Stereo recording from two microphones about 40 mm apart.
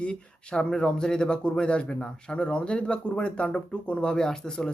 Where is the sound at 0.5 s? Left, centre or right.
Centre.